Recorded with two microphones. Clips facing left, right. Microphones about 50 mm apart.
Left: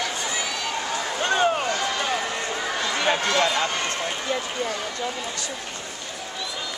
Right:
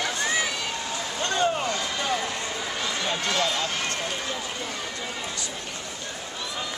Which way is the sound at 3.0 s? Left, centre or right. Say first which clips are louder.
Left 7 dB; left.